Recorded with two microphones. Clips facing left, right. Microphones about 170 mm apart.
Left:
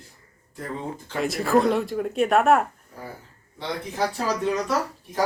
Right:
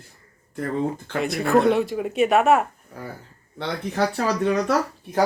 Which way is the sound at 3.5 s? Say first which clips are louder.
Right 3 dB; 65° right (ahead or behind).